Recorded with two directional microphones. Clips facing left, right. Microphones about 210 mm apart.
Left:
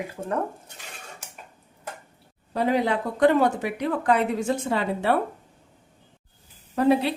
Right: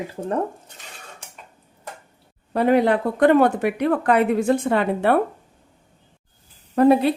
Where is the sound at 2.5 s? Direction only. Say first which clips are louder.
Right 6 dB; 60° right (ahead or behind).